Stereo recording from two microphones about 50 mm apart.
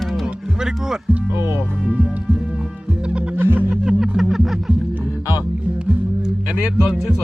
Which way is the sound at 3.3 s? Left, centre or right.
Right.